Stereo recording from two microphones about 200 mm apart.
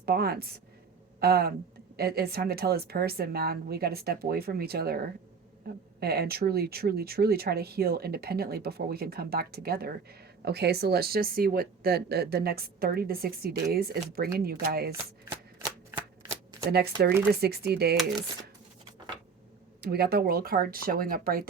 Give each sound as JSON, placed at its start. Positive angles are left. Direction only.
{"t": 0.0, "sound": "speech", "side_deg": -50}
{"t": 16.3, "sound": "shuffling cards", "side_deg": -20}
{"t": 17.3, "sound": "speech", "side_deg": -50}
{"t": 19.8, "sound": "speech", "side_deg": -50}